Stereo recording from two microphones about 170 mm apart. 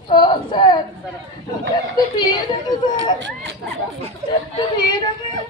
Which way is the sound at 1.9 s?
25° left (ahead or behind).